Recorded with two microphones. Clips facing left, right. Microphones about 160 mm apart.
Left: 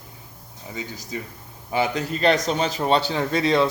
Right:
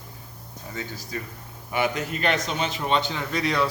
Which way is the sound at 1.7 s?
30° left (ahead or behind).